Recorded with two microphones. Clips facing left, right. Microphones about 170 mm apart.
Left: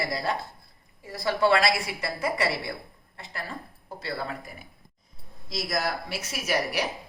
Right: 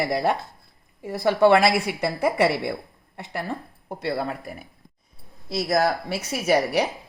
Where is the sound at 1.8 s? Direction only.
65° right (ahead or behind).